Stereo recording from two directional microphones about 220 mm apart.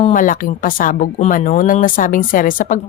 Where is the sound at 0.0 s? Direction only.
35° left (ahead or behind).